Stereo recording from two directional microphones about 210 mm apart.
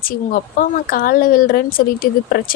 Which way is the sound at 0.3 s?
40° left (ahead or behind).